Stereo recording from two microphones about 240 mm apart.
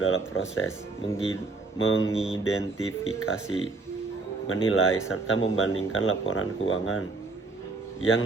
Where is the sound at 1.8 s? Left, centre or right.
Left.